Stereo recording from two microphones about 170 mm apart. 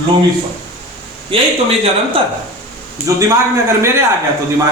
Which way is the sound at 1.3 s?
30° right (ahead or behind).